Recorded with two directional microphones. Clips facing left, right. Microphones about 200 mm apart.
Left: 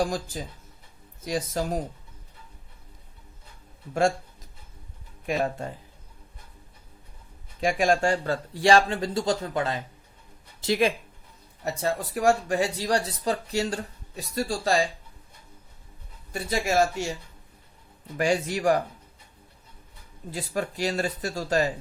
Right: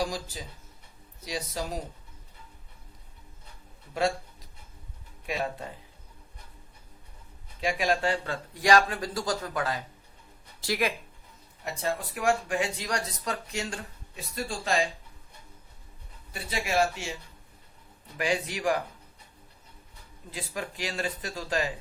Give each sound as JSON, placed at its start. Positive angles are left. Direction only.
{"t": 0.0, "sound": "speech", "side_deg": 50}
{"t": 5.2, "sound": "speech", "side_deg": 45}
{"t": 7.6, "sound": "speech", "side_deg": 45}
{"t": 11.6, "sound": "speech", "side_deg": 40}
{"t": 16.3, "sound": "speech", "side_deg": 45}
{"t": 18.2, "sound": "speech", "side_deg": 45}
{"t": 20.3, "sound": "speech", "side_deg": 40}